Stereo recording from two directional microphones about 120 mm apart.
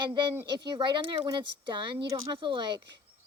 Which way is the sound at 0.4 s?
40° right (ahead or behind).